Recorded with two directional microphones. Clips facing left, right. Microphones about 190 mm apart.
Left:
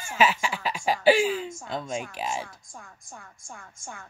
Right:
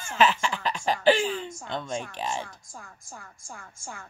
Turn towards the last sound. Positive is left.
turn(degrees=20)  # may be behind; listen again after turning